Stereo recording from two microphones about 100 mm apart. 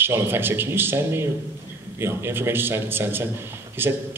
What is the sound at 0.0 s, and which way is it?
A man's voice, 20° right (ahead or behind).